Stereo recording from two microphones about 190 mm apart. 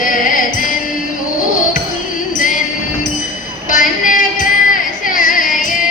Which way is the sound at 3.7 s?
45° left (ahead or behind).